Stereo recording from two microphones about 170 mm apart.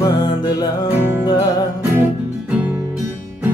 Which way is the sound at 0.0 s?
25° left (ahead or behind).